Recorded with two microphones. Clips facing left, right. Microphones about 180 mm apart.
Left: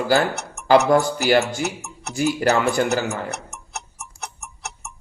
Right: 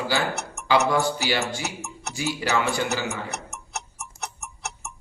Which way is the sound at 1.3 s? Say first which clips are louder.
Left 8 dB; 50° left (ahead or behind).